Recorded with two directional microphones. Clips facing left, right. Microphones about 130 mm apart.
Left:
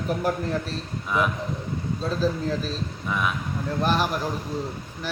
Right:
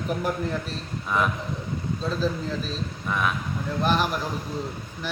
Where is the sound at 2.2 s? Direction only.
40° left (ahead or behind).